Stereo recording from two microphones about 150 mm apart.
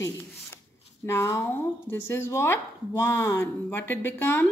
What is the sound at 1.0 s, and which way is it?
Speech, 15° left (ahead or behind).